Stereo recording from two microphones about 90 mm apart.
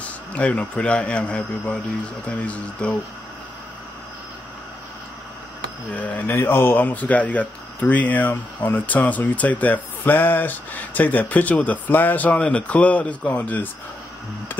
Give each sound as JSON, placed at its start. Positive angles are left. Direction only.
{"t": 0.0, "sound": "speech", "side_deg": 15}
{"t": 5.9, "sound": "speech", "side_deg": 15}